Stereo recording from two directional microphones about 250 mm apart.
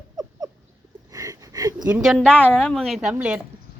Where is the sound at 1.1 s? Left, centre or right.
Centre.